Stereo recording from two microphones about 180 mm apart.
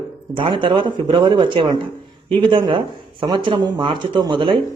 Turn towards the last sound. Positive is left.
turn(degrees=-25)  # may be behind; listen again after turning